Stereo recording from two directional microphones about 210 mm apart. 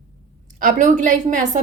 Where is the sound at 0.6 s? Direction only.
35° right (ahead or behind).